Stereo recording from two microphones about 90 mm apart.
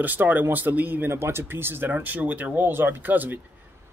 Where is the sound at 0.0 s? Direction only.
20° right (ahead or behind).